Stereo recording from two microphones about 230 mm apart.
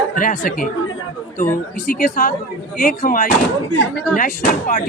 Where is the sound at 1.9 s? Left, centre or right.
Left.